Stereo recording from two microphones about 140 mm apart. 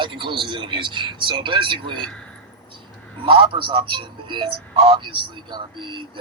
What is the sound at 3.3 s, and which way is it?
Speech, 35° right (ahead or behind).